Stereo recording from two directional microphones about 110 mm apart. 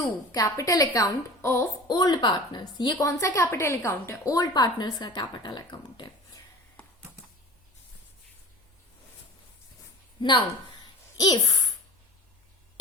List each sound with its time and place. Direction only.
0.0 s a woman's voice: 30° left (ahead or behind)
1.9 s a woman's voice: 40° left (ahead or behind)
10.2 s speech: 50° left (ahead or behind)
11.2 s a woman's voice: 35° left (ahead or behind)